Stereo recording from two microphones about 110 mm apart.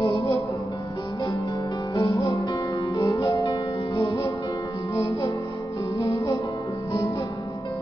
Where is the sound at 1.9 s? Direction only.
30° left (ahead or behind).